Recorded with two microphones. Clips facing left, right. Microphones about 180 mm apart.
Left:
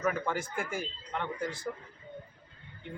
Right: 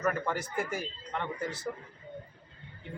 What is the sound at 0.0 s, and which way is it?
Speech, centre (ahead or behind).